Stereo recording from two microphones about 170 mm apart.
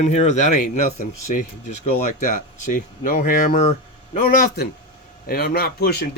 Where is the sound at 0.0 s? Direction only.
40° left (ahead or behind).